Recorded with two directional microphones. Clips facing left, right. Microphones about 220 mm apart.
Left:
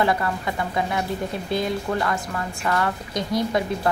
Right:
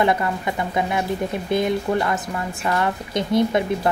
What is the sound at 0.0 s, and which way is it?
A woman's voice, 20° right (ahead or behind).